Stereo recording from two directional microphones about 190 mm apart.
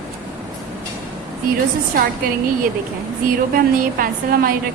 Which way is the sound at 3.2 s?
50° right (ahead or behind).